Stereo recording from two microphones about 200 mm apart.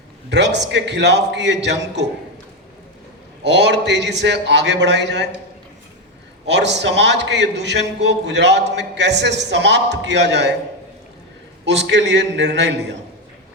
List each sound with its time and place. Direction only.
0.3 s a man's voice: 60° right (ahead or behind)
3.4 s a man's voice: 60° right (ahead or behind)
6.5 s a man's voice: 60° right (ahead or behind)
11.6 s a man's voice: 60° right (ahead or behind)